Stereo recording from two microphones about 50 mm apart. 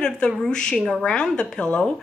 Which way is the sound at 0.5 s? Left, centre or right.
Centre.